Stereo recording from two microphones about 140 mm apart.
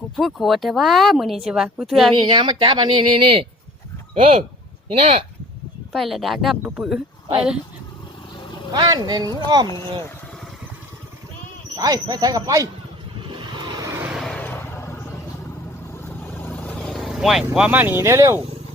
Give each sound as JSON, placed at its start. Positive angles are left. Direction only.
{"t": 0.2, "sound": "speech", "side_deg": 0}
{"t": 2.1, "sound": "speech", "side_deg": -40}
{"t": 5.9, "sound": "speech", "side_deg": 0}
{"t": 8.7, "sound": "speech", "side_deg": -30}
{"t": 11.8, "sound": "speech", "side_deg": -25}
{"t": 13.2, "sound": "vehicle", "side_deg": -35}
{"t": 14.1, "sound": "vehicle", "side_deg": 0}
{"t": 16.0, "sound": "vehicle", "side_deg": 15}